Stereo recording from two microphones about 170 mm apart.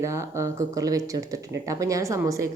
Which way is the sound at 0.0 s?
15° right (ahead or behind).